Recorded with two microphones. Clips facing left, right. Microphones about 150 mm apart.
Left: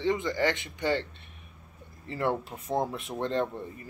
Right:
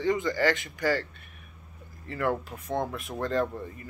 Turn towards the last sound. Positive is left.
turn(degrees=25)  # may be behind; listen again after turning